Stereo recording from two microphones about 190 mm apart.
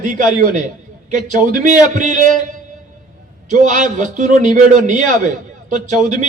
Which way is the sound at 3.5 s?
40° right (ahead or behind).